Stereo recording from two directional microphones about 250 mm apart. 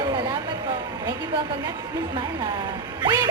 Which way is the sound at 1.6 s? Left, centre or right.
Centre.